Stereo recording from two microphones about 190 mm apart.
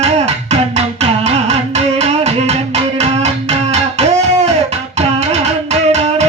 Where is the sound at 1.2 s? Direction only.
35° right (ahead or behind).